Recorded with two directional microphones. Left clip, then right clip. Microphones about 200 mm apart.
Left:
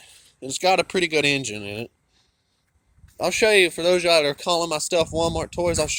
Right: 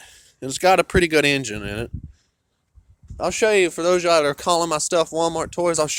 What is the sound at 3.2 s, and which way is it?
Speech, 10° right (ahead or behind).